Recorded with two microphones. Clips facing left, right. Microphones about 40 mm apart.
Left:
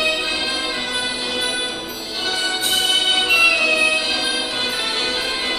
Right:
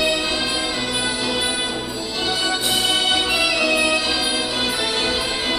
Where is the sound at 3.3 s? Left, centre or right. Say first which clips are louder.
Left 3 dB; left.